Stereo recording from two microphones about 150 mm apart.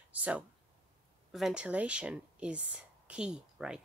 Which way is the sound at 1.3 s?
Centre (ahead or behind).